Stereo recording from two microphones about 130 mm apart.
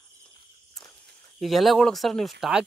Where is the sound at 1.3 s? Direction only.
Centre (ahead or behind).